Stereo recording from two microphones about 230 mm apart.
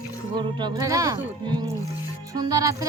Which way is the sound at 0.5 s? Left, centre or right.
Centre.